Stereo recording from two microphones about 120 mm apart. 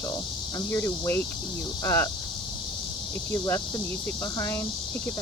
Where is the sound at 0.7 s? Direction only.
20° left (ahead or behind).